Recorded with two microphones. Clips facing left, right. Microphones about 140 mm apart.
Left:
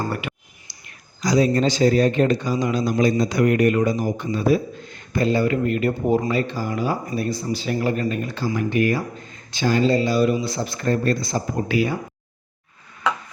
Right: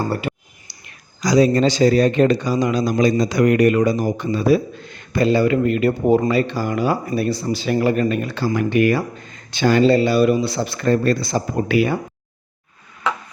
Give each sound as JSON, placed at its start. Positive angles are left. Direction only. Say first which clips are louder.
{"t": 0.1, "sound": "speech", "louder": "right 5 dB", "side_deg": -35}
{"t": 1.2, "sound": "speech", "louder": "right 3 dB", "side_deg": -90}